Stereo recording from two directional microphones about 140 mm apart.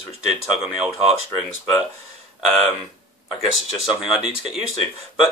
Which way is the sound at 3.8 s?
5° right (ahead or behind).